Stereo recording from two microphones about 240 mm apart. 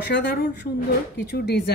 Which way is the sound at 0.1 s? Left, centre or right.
Left.